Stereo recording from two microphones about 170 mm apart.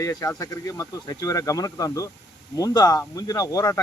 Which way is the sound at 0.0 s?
20° left (ahead or behind).